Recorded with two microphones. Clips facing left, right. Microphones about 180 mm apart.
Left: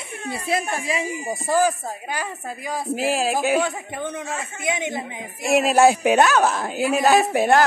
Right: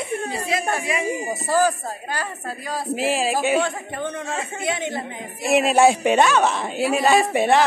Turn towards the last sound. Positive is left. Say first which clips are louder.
# even
turn(degrees=0)  # may be behind; listen again after turning